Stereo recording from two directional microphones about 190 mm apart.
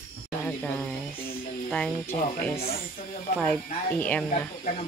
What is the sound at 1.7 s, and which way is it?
Speech, 5° left (ahead or behind).